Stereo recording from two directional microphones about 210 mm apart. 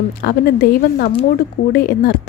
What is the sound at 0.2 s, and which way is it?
Speech, 45° left (ahead or behind).